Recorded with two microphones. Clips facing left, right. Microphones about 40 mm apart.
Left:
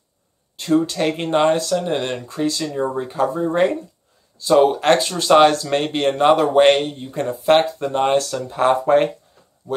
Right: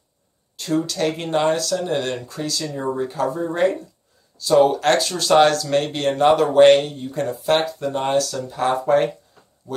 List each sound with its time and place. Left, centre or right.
0.6 s speech: left